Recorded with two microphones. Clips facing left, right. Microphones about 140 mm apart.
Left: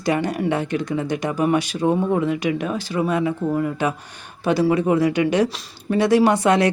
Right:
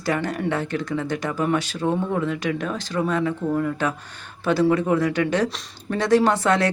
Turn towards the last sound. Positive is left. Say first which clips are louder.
# left 3 dB
turn(degrees=15)  # may be behind; listen again after turning